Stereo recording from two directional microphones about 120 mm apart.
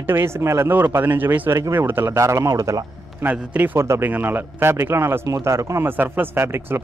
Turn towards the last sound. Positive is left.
turn(degrees=-20)  # may be behind; listen again after turning